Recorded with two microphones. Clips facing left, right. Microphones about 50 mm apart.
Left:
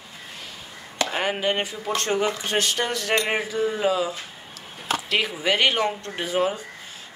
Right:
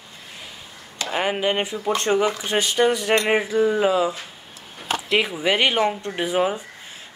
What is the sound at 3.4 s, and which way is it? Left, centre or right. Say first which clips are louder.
Speech: right 4 dB; right.